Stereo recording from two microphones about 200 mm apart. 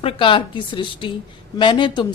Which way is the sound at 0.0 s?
25° left (ahead or behind).